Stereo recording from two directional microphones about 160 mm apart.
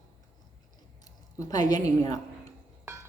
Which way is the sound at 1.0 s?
20° left (ahead or behind).